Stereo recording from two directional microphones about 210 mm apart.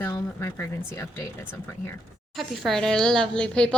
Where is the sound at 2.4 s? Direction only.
Centre (ahead or behind).